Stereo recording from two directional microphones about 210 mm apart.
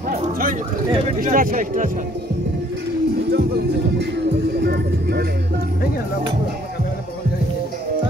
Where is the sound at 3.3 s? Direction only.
50° right (ahead or behind).